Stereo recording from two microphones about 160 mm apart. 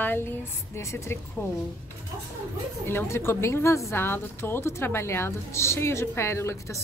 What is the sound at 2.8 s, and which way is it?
A woman's voice, 15° left (ahead or behind).